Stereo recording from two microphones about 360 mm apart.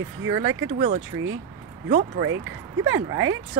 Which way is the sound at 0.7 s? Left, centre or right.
Centre.